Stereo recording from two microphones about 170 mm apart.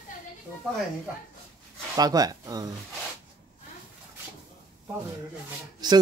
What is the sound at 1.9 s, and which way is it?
Speech, 20° right (ahead or behind).